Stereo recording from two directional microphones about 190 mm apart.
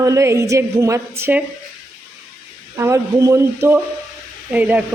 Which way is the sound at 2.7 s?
15° right (ahead or behind).